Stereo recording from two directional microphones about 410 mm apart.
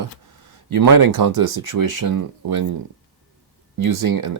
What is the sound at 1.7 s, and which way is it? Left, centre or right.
Speech, right.